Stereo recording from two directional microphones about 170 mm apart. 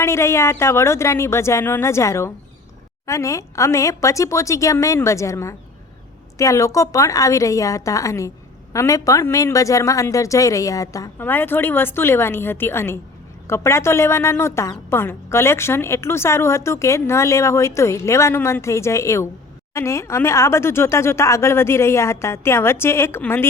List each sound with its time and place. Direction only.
0.0 s a woman's voice: 15° left (ahead or behind)